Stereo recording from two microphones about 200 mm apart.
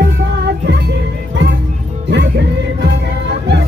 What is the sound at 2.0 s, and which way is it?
Music, 60° right (ahead or behind).